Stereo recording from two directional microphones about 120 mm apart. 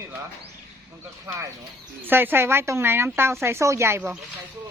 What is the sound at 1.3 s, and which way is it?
A woman's voice, 25° right (ahead or behind).